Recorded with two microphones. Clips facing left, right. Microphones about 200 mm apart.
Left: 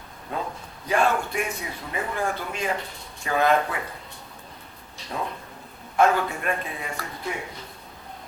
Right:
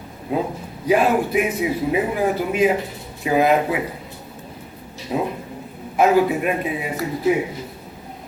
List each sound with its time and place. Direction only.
0.3 s a man's voice: 5° right (ahead or behind)
5.1 s a man's voice: 15° right (ahead or behind)
6.9 s speech: 20° right (ahead or behind)